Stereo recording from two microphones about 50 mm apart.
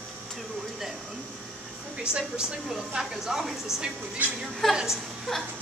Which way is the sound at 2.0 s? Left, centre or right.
Centre.